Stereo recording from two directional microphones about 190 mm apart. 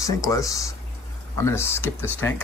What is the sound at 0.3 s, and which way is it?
Speech, 15° left (ahead or behind).